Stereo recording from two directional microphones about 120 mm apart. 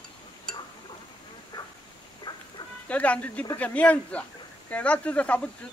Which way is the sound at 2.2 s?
35° left (ahead or behind).